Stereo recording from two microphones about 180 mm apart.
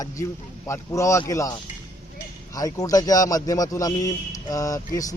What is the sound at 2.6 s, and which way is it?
Speech, 20° left (ahead or behind).